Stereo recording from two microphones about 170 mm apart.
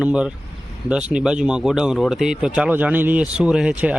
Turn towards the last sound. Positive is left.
turn(degrees=-10)  # may be behind; listen again after turning